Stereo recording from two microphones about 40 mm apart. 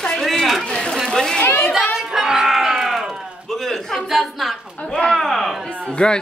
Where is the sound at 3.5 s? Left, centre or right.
Centre.